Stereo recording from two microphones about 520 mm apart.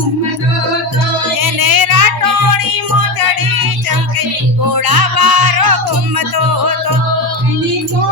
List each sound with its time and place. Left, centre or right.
1.4 s music: right
4.7 s music: right